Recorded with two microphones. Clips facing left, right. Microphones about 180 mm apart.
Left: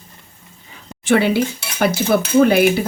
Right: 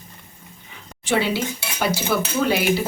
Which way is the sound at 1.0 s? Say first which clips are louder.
Left 6 dB; 55° left (ahead or behind).